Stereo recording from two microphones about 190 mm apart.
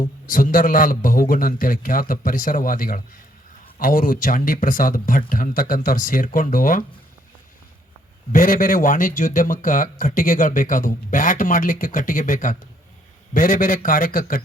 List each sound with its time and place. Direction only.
0.3 s a man's voice: 45° left (ahead or behind)
8.3 s a man's voice: 45° left (ahead or behind)